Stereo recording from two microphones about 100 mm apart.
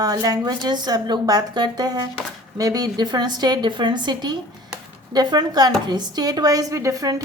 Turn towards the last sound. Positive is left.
turn(degrees=-35)  # may be behind; listen again after turning